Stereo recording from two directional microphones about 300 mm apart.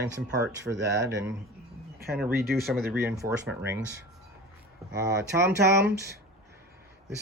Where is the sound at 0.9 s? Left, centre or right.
Right.